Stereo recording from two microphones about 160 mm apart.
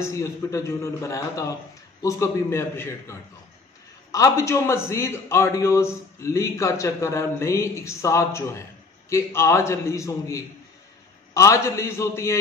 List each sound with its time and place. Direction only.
0.0 s a man's voice: 20° left (ahead or behind)